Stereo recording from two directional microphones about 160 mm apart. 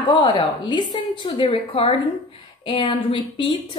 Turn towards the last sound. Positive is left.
turn(degrees=30)  # may be behind; listen again after turning